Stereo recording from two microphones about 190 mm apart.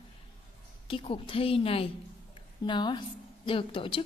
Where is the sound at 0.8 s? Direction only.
30° left (ahead or behind).